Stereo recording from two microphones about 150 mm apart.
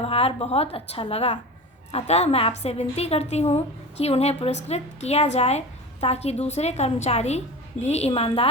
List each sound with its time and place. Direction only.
0.0 s a woman's voice: 40° left (ahead or behind)